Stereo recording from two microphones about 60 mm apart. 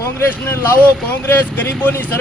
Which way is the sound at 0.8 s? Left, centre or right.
Left.